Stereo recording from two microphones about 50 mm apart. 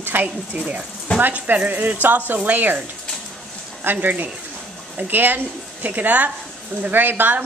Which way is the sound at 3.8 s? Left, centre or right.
Right.